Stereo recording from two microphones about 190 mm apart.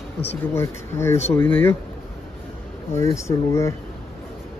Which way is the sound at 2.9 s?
15° left (ahead or behind).